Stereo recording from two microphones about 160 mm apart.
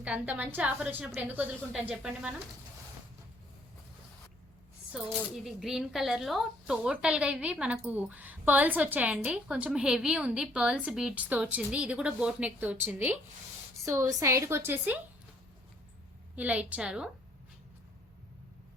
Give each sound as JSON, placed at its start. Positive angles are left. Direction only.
{"t": 0.0, "sound": "a woman's voice", "side_deg": -10}
{"t": 4.9, "sound": "a woman's voice", "side_deg": -5}
{"t": 16.3, "sound": "a woman's voice", "side_deg": -10}